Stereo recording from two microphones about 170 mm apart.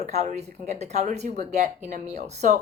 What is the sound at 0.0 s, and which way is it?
A woman's voice, 40° right (ahead or behind).